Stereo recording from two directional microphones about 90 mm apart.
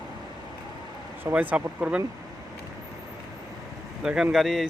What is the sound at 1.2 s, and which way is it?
Speech, 20° right (ahead or behind).